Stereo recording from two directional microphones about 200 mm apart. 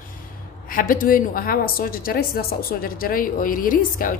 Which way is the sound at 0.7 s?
45° left (ahead or behind).